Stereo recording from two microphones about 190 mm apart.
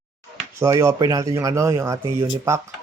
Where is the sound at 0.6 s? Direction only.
15° right (ahead or behind).